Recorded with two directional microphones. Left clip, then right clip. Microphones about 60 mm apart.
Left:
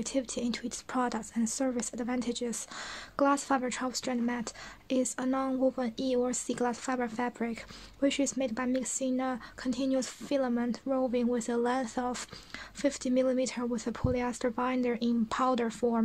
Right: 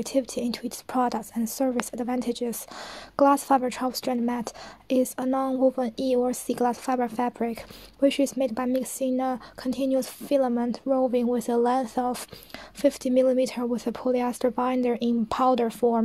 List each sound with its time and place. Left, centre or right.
0.0 s speech: right
3.2 s a woman's voice: right